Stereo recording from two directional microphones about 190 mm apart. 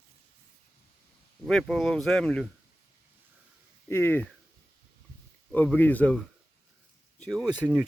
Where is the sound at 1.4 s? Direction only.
Centre (ahead or behind).